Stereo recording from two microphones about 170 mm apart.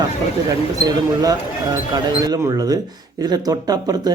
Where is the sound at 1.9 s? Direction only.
25° right (ahead or behind).